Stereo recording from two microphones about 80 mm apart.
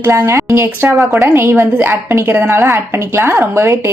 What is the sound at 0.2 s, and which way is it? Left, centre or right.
A woman's voice, right.